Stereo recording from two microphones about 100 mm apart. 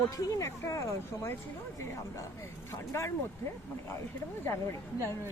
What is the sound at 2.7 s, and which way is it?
Speech, 30° left (ahead or behind).